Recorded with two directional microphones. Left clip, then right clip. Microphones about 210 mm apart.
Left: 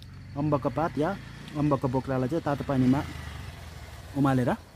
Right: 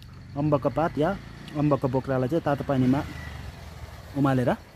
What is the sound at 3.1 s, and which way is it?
Vehicle, 30° left (ahead or behind).